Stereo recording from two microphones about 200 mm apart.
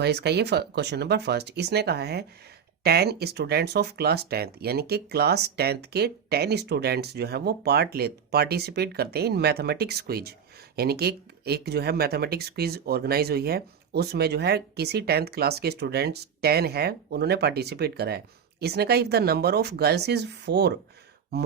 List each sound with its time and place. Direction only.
0.0 s speech: 55° right (ahead or behind)